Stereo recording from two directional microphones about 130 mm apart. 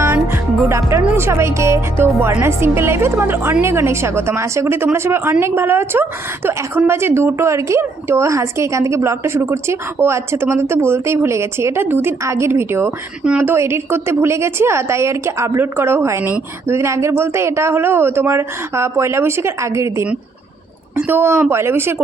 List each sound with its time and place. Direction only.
0.0 s music: 20° right (ahead or behind)
1.0 s a woman's voice: 20° right (ahead or behind)